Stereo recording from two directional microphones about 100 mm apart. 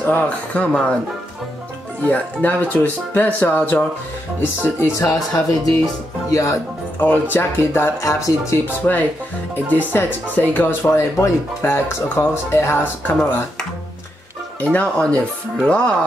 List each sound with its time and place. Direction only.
0.0 s speech: 15° left (ahead or behind)
2.0 s speech: 15° left (ahead or behind)
4.9 s speech: 35° left (ahead or behind)
7.0 s speech: 20° left (ahead or behind)
10.8 s speech: 30° left (ahead or behind)
14.6 s speech: 15° left (ahead or behind)